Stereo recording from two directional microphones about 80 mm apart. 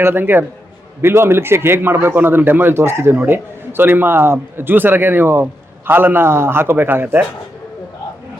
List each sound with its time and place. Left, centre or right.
0.0 s a man's voice: right